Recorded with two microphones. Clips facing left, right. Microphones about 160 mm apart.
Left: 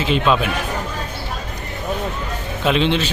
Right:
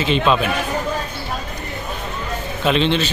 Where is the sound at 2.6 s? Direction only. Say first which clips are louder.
Even; 10° left (ahead or behind).